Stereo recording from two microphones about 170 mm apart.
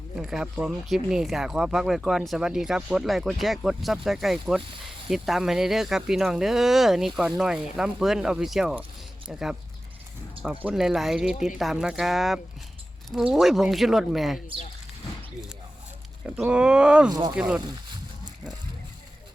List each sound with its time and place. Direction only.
0.2 s speech: 5° right (ahead or behind)
16.2 s speech: 10° right (ahead or behind)
17.1 s speech: 25° right (ahead or behind)
17.3 s speech: 5° right (ahead or behind)